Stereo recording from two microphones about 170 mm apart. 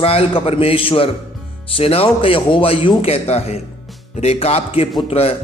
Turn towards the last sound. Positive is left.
turn(degrees=35)  # may be behind; listen again after turning